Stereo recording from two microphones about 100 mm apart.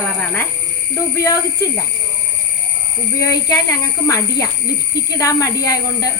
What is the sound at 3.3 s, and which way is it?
Speech, 35° left (ahead or behind).